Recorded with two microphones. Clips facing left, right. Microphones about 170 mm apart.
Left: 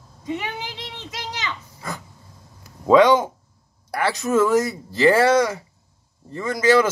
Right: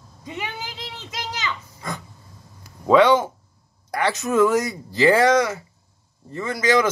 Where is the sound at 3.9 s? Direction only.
Centre (ahead or behind).